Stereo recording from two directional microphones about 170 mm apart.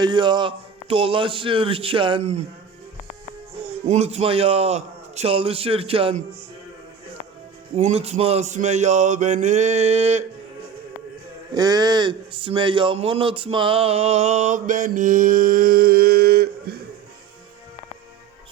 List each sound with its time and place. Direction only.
0.0 s speech: 25° right (ahead or behind)
3.8 s speech: 40° right (ahead or behind)
7.8 s mantra: 40° right (ahead or behind)
11.5 s speech: 25° right (ahead or behind); by 16.7 s 65° right (ahead or behind)